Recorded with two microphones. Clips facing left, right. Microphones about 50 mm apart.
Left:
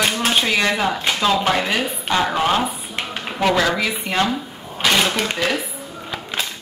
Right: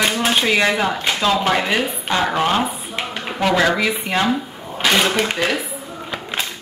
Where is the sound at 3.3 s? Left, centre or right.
Centre.